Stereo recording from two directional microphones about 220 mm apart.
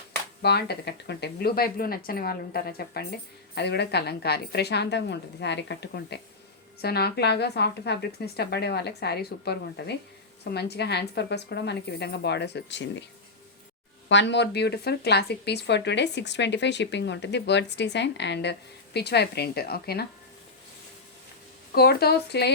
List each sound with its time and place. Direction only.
0.4 s speech: 50° left (ahead or behind)
14.1 s speech: 55° left (ahead or behind)
21.8 s speech: 45° left (ahead or behind)